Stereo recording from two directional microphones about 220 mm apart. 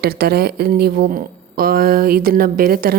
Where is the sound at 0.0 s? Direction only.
45° right (ahead or behind).